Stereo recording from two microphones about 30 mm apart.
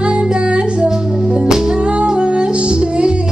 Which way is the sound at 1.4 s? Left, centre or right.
Centre.